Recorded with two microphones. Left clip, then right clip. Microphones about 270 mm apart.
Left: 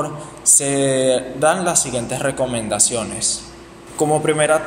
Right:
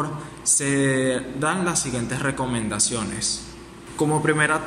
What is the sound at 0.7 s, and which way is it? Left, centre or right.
Speech, left.